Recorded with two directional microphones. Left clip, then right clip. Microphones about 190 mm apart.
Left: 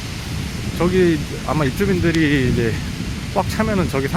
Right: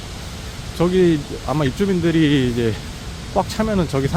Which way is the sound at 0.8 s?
10° right (ahead or behind).